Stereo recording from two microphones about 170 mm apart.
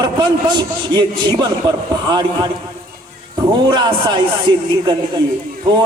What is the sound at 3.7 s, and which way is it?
A man's voice, 25° right (ahead or behind).